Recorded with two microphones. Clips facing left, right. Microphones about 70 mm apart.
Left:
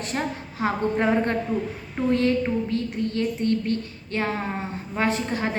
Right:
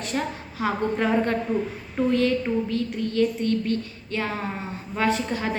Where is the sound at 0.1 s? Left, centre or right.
Left.